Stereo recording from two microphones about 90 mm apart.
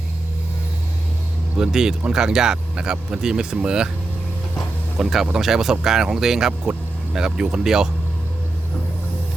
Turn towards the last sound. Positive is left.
turn(degrees=-5)  # may be behind; listen again after turning